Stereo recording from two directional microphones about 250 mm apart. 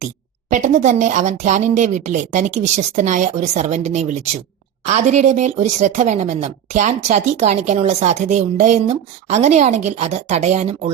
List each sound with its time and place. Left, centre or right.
0.5 s speech: right